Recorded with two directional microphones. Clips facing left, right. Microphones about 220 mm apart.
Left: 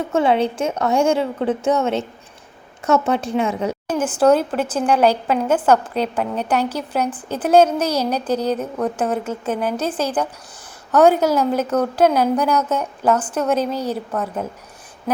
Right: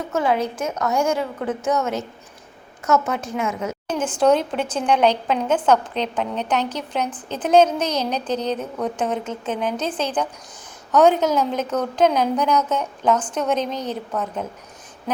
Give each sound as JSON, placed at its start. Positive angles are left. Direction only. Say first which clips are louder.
{"t": 0.1, "sound": "a woman's voice", "louder": "left 4 dB", "side_deg": 30}
{"t": 3.8, "sound": "a woman's voice", "louder": "left 2 dB", "side_deg": 5}